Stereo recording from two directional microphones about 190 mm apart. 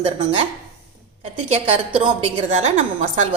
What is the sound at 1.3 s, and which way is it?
A woman's voice, 30° right (ahead or behind).